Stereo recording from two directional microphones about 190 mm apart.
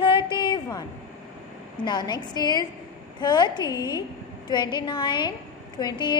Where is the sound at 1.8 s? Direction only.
20° left (ahead or behind).